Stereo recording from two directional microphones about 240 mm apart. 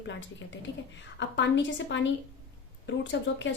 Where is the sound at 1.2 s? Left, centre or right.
Left.